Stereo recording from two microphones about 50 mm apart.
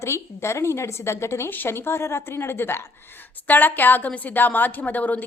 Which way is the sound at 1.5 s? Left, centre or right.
Left.